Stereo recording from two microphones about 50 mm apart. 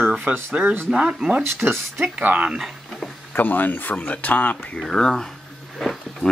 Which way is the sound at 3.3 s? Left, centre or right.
Left.